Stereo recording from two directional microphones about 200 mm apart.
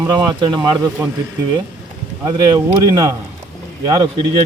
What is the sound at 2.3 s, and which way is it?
Speech, 20° right (ahead or behind).